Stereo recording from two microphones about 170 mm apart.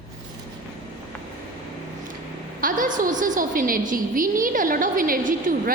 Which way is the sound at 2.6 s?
55° right (ahead or behind).